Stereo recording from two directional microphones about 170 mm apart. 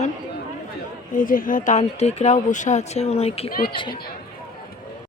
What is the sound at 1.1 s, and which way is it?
Speech, 55° left (ahead or behind).